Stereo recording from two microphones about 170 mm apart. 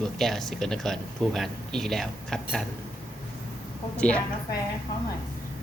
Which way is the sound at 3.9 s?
5° left (ahead or behind).